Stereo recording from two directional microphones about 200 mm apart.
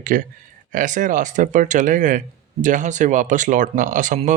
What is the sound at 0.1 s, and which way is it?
Speech, 45° right (ahead or behind).